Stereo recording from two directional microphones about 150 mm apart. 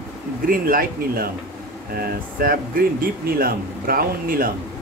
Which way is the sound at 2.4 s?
75° right (ahead or behind).